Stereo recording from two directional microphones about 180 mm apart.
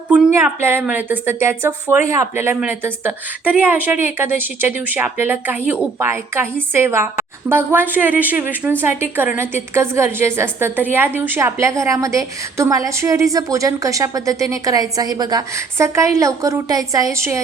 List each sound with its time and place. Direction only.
0.3 s a woman's voice: 15° right (ahead or behind)